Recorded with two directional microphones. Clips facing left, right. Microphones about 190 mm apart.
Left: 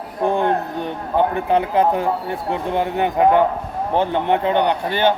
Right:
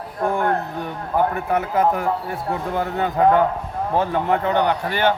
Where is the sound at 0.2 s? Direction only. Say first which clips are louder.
Left 2 dB; 25° left (ahead or behind).